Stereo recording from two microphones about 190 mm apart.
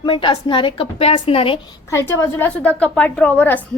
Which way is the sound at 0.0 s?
25° left (ahead or behind).